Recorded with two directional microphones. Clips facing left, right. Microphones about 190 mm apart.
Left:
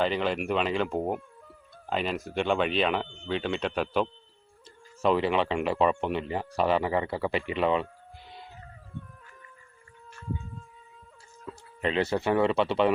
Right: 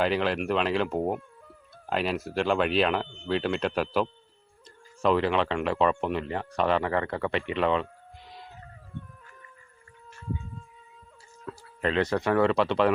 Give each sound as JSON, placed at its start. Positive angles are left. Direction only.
{"t": 0.0, "sound": "speech", "side_deg": -5}
{"t": 11.4, "sound": "a sound", "side_deg": 0}
{"t": 11.9, "sound": "speech", "side_deg": 25}
{"t": 12.4, "sound": "speech", "side_deg": 0}